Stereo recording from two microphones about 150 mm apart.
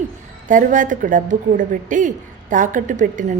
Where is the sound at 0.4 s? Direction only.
60° right (ahead or behind).